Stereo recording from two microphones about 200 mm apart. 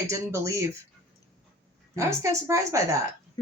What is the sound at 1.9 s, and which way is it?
Speech, 15° right (ahead or behind).